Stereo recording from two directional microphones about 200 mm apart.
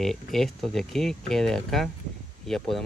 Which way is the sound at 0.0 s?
Centre (ahead or behind).